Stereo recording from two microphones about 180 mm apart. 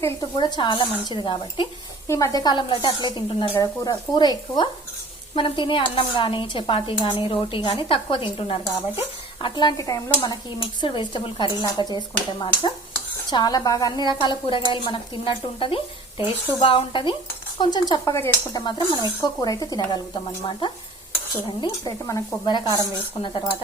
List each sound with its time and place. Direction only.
0.0 s a woman's voice: 25° left (ahead or behind)